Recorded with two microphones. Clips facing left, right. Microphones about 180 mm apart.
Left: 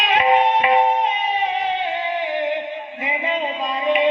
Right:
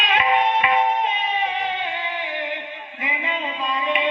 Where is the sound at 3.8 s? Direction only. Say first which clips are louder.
Left 7 dB; 40° left (ahead or behind).